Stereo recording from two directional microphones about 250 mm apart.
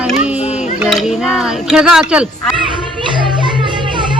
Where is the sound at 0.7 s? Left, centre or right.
Centre.